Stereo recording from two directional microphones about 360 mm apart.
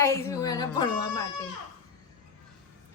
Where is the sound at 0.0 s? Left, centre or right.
Centre.